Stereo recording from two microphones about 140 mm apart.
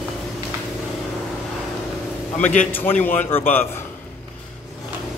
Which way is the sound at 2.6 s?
15° left (ahead or behind).